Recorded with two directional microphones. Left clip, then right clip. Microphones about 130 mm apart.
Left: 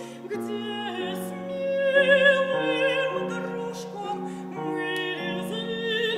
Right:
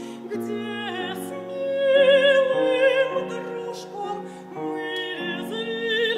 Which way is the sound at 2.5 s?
Centre (ahead or behind).